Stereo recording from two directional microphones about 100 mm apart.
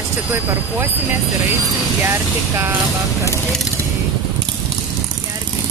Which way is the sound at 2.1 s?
25° right (ahead or behind).